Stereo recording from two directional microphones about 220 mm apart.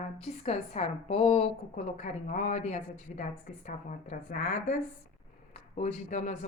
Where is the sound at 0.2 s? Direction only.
30° left (ahead or behind).